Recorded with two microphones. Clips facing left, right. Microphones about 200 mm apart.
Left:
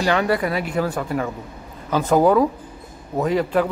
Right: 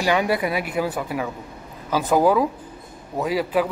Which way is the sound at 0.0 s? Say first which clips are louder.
Left 1 dB; 10° right (ahead or behind).